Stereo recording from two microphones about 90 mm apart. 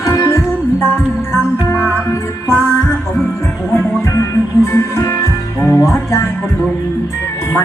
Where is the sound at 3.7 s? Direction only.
30° left (ahead or behind).